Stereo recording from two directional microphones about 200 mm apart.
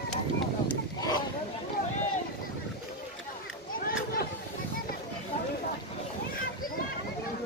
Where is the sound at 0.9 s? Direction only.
20° left (ahead or behind).